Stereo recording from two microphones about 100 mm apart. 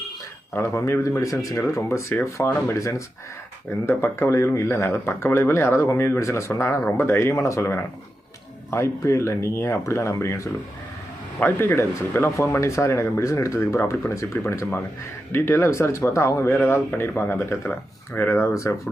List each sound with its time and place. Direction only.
0.5 s speech: 25° left (ahead or behind)